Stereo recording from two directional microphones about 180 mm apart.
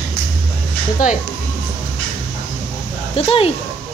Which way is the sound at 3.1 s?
30° left (ahead or behind).